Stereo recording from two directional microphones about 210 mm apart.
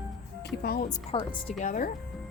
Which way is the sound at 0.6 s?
45° left (ahead or behind).